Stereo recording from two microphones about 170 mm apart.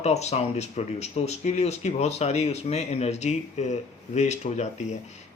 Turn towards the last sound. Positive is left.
turn(degrees=45)  # may be behind; listen again after turning